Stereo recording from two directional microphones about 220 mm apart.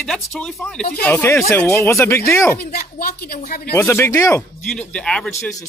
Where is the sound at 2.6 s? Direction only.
45° left (ahead or behind).